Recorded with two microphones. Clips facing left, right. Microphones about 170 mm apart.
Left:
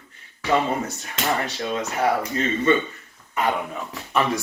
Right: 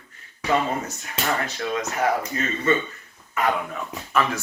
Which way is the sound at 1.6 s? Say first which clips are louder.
Even; 30° left (ahead or behind).